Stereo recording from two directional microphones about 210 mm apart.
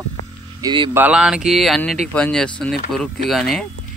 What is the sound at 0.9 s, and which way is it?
Speech, 5° right (ahead or behind).